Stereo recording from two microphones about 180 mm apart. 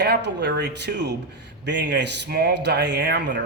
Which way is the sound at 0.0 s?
70° right (ahead or behind).